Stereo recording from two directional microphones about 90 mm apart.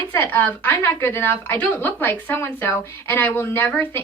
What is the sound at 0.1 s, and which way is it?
Speech, 20° left (ahead or behind).